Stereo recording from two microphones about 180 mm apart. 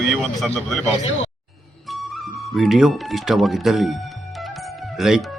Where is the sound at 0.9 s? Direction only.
40° left (ahead or behind).